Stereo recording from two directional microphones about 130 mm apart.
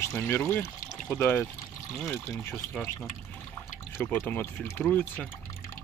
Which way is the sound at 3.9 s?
15° left (ahead or behind).